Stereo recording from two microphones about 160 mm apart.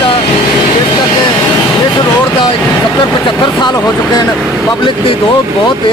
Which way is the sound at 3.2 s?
30° left (ahead or behind).